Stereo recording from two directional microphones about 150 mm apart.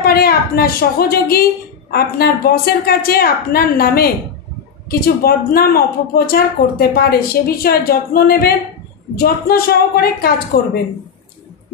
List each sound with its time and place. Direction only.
0.0 s a woman's voice: 90° left